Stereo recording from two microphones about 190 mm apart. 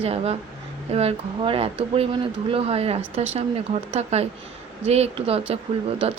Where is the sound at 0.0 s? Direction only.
35° right (ahead or behind).